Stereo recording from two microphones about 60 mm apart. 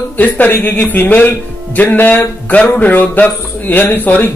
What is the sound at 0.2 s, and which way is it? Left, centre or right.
A man's voice, left.